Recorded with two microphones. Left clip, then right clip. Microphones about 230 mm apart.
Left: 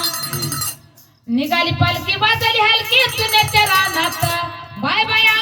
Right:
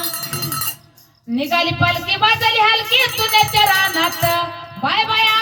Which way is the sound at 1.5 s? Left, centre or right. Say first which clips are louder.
Right 1 dB; left.